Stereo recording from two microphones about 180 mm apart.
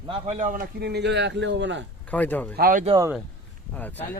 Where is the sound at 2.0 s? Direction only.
10° left (ahead or behind).